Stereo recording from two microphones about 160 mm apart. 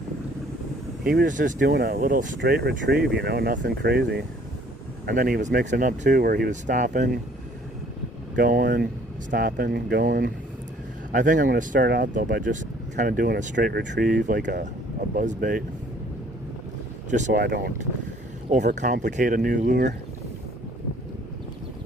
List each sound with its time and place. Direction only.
1.1 s speech: 55° right (ahead or behind)
1.6 s speech: 85° right; by 2.4 s 60° right (ahead or behind)
2.4 s speech: 90° right
5.0 s speech: 65° right (ahead or behind)
6.1 s speech: 75° right (ahead or behind)
6.5 s speech: 50° right (ahead or behind)
8.4 s speech: 65° right (ahead or behind)
9.3 s speech: 70° right (ahead or behind)
11.1 s speech: 55° right (ahead or behind); by 12.0 s 80° right
12.1 s speech: 55° right (ahead or behind); by 14.6 s 75° right (ahead or behind)
15.1 s speech: 55° right (ahead or behind)
17.1 s speech: 50° right (ahead or behind)
17.4 s speech: 90° right
18.5 s speech: 50° right (ahead or behind)